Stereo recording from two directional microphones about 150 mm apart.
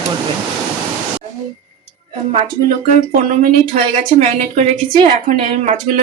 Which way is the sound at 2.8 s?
55° right (ahead or behind).